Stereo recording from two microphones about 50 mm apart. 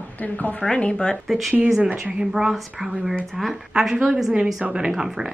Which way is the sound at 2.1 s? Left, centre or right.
Centre.